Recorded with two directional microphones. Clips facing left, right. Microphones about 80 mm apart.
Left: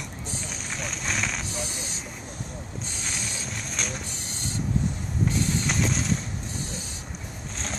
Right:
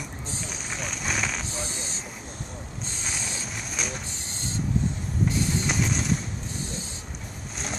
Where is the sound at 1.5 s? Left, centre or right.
Right.